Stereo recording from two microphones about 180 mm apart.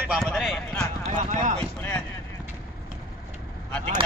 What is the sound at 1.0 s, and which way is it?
Clip-clop, 40° right (ahead or behind).